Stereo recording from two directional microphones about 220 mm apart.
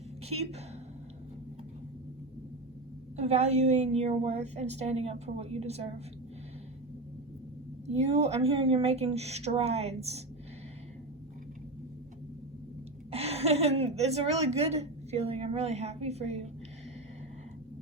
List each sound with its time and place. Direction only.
3.2 s a woman's voice: 30° right (ahead or behind)
7.9 s a woman's voice: 30° right (ahead or behind)
13.1 s a woman's voice: 30° right (ahead or behind)